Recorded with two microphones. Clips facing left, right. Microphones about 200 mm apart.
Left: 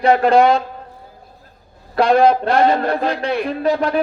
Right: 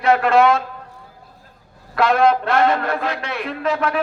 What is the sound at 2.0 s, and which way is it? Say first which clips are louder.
Speech: left 3 dB; 30° left (ahead or behind).